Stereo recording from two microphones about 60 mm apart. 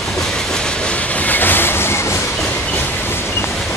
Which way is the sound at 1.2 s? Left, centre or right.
Left.